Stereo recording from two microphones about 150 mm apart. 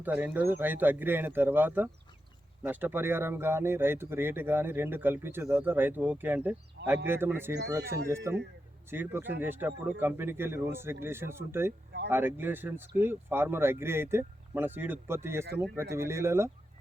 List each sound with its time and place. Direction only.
0.0 s speech: 10° right (ahead or behind)